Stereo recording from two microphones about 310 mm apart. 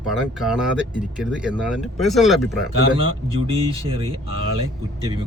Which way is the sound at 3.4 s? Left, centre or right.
Centre.